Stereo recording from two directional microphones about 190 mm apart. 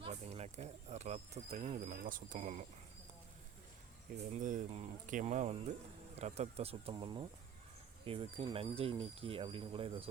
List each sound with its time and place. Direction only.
0.0 s a sound: 35° right (ahead or behind)
2.0 s speech: 45° right (ahead or behind)
4.4 s speech: 40° right (ahead or behind)